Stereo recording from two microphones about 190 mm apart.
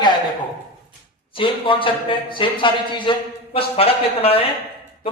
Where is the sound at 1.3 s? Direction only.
25° left (ahead or behind).